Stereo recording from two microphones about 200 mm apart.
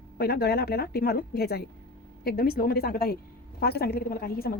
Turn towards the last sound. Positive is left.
turn(degrees=50)  # may be behind; listen again after turning